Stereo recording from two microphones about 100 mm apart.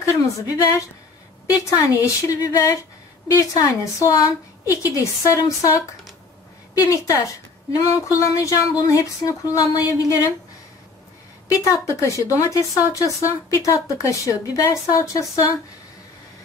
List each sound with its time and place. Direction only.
0.0 s a woman's voice: 35° left (ahead or behind)
6.8 s a woman's voice: 35° left (ahead or behind)
11.4 s a woman's voice: 35° left (ahead or behind)